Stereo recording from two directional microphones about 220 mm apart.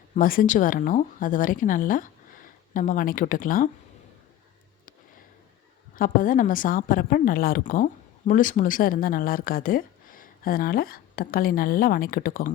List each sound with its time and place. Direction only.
0.1 s speech: 40° left (ahead or behind)
6.0 s speech: 40° left (ahead or behind)